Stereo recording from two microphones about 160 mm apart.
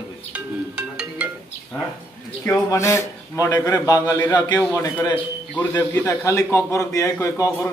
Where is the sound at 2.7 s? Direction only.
15° left (ahead or behind).